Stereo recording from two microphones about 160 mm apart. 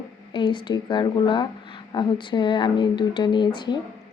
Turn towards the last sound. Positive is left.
turn(degrees=30)  # may be behind; listen again after turning